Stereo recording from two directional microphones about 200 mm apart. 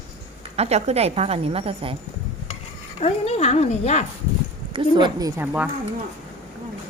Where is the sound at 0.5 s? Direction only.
30° right (ahead or behind).